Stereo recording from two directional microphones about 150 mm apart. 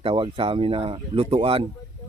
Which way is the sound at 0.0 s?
35° right (ahead or behind).